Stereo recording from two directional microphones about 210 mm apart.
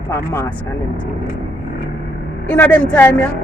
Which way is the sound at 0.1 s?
10° left (ahead or behind).